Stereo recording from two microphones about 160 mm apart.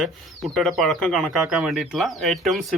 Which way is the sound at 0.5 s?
Centre (ahead or behind).